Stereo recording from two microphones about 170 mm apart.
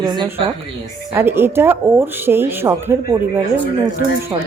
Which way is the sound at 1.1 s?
15° right (ahead or behind).